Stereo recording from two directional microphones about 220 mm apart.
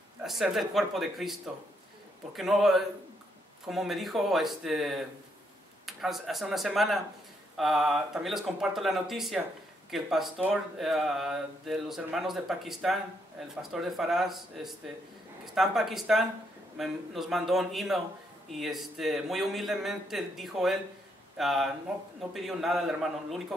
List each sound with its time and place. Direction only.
0.2 s speech: centre (ahead or behind)